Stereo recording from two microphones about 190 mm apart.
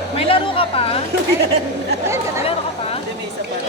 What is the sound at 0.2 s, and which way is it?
Speech, 30° left (ahead or behind).